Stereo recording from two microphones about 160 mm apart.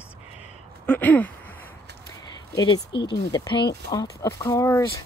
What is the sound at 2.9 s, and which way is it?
Speech, 90° left.